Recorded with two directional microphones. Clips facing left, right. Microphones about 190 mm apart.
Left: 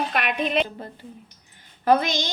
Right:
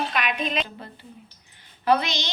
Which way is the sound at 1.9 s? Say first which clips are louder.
Left 2 dB; 50° left (ahead or behind).